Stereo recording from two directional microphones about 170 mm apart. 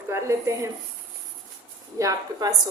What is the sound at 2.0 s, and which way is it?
Speech, 20° right (ahead or behind).